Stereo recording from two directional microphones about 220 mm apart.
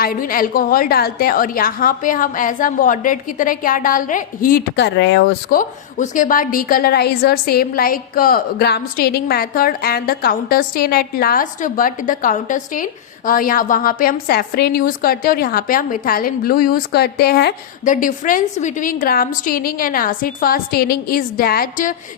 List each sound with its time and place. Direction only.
0.0 s a woman's voice: 40° left (ahead or behind)
5.5 s a woman's voice: 35° left (ahead or behind)